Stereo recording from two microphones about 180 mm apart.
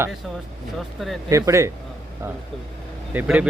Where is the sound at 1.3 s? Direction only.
15° right (ahead or behind).